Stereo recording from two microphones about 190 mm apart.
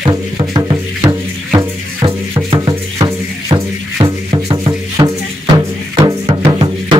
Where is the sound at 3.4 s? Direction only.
20° right (ahead or behind).